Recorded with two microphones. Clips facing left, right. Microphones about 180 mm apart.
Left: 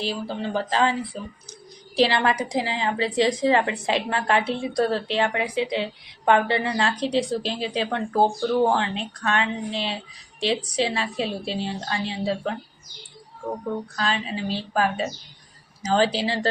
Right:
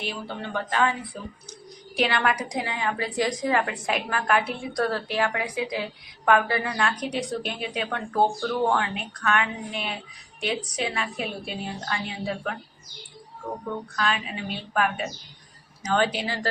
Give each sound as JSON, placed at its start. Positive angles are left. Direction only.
{"t": 0.0, "sound": "a woman's voice", "side_deg": 30}
{"t": 13.9, "sound": "a woman's voice", "side_deg": 30}